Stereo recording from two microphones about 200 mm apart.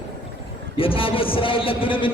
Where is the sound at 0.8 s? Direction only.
25° left (ahead or behind).